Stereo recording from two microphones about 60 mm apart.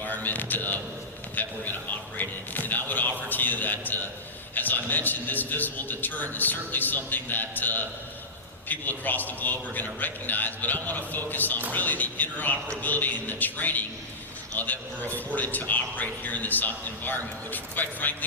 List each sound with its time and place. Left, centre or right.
0.0 s a man's voice: left
2.1 s a sound: left
4.5 s a man's voice: left